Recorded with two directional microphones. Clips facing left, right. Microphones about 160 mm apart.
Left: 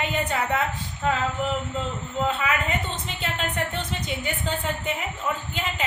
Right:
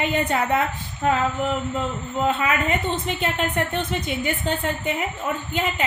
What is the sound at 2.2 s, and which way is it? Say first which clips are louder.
A woman's voice: right 4 dB; 60° right (ahead or behind).